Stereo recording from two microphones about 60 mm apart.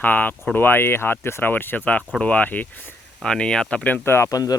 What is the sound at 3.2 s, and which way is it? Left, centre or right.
Speech, centre.